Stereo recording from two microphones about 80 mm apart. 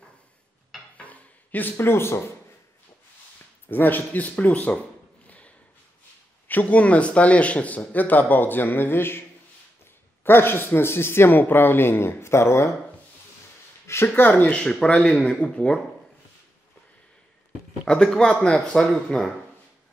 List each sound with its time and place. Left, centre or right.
0.9 s a sound: centre
3.6 s speech: left
10.2 s speech: left
14.0 s speech: left
14.5 s speech: centre
17.8 s speech: centre